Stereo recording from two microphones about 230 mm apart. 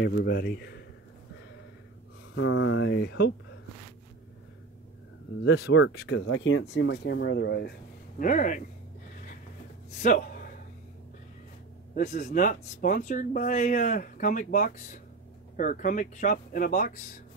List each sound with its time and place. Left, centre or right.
0.0 s speech: left
2.3 s speech: left
5.4 s speech: left
8.2 s speech: left
10.0 s a man's voice: left
11.9 s speech: left